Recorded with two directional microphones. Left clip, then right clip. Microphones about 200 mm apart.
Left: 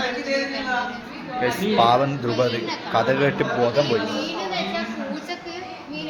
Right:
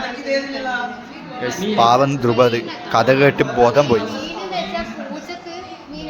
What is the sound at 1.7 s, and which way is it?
A man's voice, 20° right (ahead or behind).